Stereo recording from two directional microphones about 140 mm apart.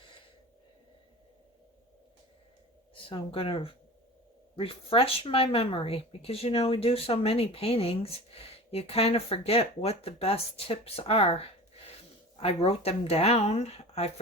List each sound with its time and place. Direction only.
2.9 s speech: 40° left (ahead or behind)